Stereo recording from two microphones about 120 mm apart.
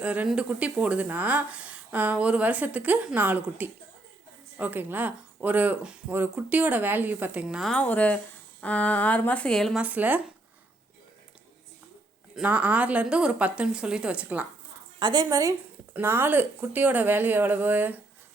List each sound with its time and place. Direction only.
0.0 s a woman's voice: 10° right (ahead or behind)
7.7 s a woman's voice: 10° left (ahead or behind)
9.7 s a woman's voice: 15° right (ahead or behind)
12.3 s a woman's voice: 10° right (ahead or behind)
14.9 s a woman's voice: 35° right (ahead or behind); by 18.0 s 15° right (ahead or behind)